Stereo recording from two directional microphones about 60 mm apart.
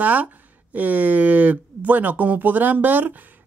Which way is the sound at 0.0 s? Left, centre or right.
Right.